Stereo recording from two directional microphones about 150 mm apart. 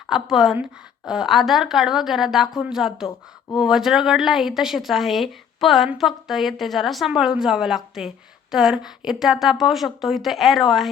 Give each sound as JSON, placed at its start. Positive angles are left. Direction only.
{"t": 0.1, "sound": "speech", "side_deg": 0}